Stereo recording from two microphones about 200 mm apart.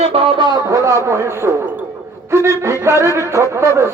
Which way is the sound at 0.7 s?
15° right (ahead or behind).